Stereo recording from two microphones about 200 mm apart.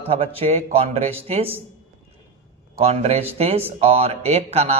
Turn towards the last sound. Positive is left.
turn(degrees=-30)  # may be behind; listen again after turning